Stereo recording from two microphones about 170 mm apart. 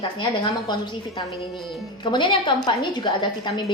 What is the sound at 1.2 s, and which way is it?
A woman's voice, 30° left (ahead or behind).